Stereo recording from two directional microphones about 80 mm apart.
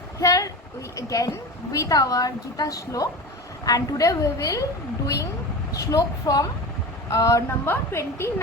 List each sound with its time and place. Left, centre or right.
0.2 s a sound: left
0.9 s a woman's voice: left
5.7 s a woman's voice: left
7.6 s a woman's voice: left